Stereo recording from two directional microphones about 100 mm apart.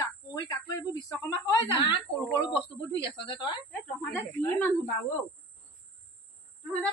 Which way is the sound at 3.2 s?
50° left (ahead or behind).